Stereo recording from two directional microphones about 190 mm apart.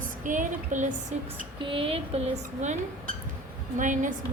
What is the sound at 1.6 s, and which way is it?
Speech, 30° right (ahead or behind).